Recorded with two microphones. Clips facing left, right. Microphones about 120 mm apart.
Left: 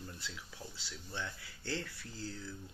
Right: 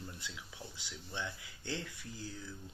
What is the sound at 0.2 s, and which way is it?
Speech, 15° right (ahead or behind).